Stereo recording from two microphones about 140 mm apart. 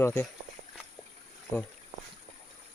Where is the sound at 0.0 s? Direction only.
20° left (ahead or behind).